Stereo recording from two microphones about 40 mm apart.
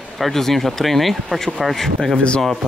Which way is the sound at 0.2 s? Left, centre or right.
Centre.